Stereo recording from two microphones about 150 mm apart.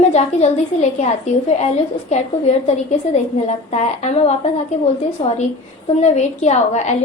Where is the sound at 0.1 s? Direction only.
45° left (ahead or behind).